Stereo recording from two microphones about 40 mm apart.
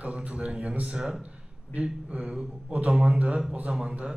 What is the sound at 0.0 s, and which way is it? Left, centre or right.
Speech, right.